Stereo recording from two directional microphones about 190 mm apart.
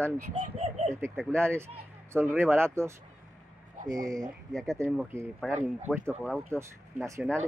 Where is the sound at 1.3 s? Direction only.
15° right (ahead or behind).